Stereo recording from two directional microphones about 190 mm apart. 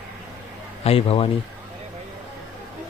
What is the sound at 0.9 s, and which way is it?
Speech, 30° left (ahead or behind).